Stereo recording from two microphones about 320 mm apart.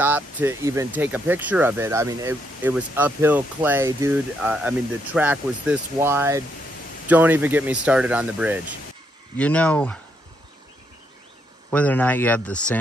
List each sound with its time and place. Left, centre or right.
0.0 s speech: centre
11.7 s speech: centre